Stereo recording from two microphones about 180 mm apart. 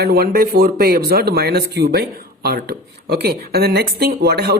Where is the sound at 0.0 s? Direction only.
60° right (ahead or behind).